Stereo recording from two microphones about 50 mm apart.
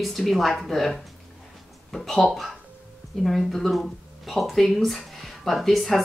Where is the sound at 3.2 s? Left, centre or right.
Centre.